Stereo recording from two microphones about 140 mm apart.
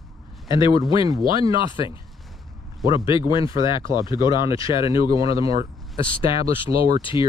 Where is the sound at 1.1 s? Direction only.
25° right (ahead or behind).